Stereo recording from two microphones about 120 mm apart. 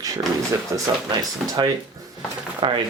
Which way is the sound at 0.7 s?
25° right (ahead or behind).